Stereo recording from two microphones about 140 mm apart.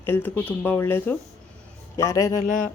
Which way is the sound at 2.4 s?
65° left (ahead or behind).